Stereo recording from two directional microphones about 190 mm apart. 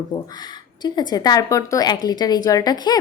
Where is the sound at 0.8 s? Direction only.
20° left (ahead or behind).